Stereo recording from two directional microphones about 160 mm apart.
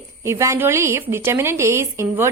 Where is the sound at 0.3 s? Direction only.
15° right (ahead or behind).